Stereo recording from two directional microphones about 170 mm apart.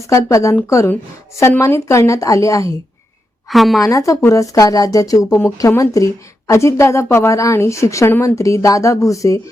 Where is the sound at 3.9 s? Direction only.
20° left (ahead or behind).